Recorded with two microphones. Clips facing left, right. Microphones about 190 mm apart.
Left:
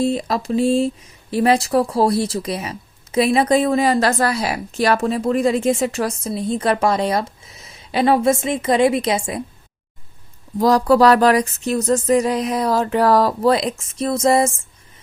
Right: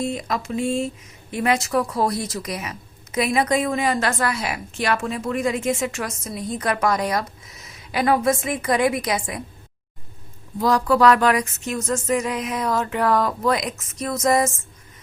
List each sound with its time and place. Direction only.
0.0 s speech: 30° left (ahead or behind)
10.6 s speech: 35° left (ahead or behind)